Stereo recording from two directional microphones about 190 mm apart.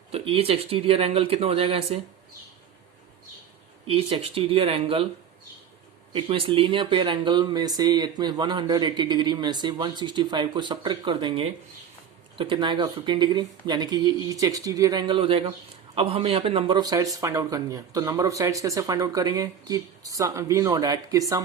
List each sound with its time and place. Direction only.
0.1 s speech: 30° right (ahead or behind)
3.8 s speech: 30° right (ahead or behind)
6.1 s speech: 30° right (ahead or behind)